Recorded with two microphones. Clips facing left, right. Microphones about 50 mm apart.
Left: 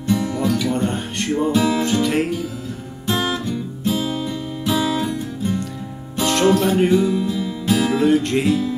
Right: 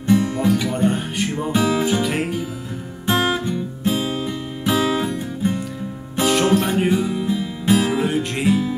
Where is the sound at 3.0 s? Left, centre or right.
Right.